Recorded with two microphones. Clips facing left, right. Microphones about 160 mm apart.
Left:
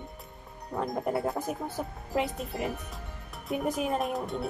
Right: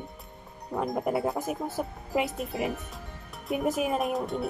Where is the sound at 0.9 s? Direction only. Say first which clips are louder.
Right 2 dB; 5° right (ahead or behind).